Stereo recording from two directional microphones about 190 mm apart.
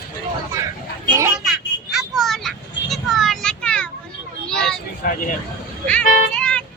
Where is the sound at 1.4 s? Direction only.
Centre (ahead or behind).